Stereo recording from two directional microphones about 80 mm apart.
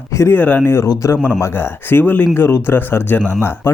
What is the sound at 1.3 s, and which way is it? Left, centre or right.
Speech, left.